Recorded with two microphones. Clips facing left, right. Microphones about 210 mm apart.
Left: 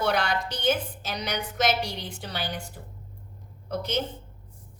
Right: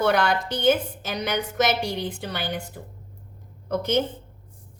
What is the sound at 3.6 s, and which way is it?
Speech, 55° right (ahead or behind).